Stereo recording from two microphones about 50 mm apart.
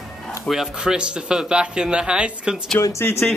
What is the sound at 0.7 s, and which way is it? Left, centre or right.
Speech, centre.